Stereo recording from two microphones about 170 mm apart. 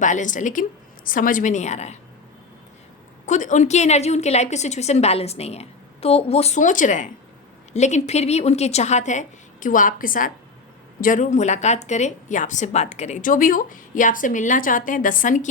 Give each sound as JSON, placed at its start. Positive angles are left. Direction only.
{"t": 0.0, "sound": "a woman's voice", "side_deg": 50}
{"t": 3.2, "sound": "a woman's voice", "side_deg": 45}